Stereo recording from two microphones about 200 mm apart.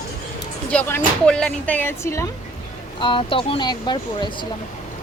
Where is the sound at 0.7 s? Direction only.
5° left (ahead or behind).